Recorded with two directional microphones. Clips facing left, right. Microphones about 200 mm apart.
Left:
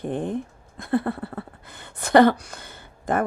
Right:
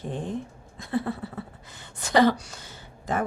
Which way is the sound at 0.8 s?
55° left (ahead or behind).